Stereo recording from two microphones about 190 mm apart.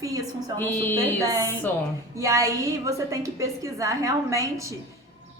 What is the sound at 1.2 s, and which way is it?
A woman's voice, 15° right (ahead or behind).